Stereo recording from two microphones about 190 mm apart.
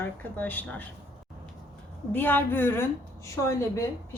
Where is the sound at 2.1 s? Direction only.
10° left (ahead or behind).